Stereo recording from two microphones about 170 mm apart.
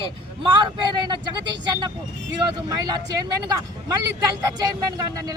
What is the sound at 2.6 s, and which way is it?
Speech, 25° right (ahead or behind).